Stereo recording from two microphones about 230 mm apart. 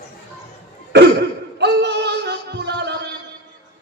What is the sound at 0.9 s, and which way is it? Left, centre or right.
Music, right.